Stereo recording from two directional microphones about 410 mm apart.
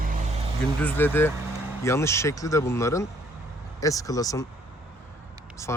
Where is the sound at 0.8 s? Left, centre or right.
Centre.